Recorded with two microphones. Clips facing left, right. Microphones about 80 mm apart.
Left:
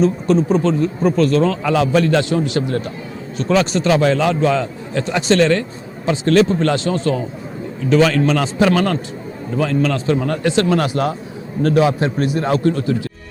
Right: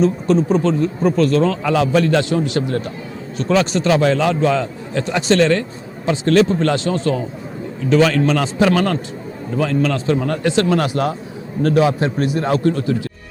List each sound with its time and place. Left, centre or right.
0.0 s speech: centre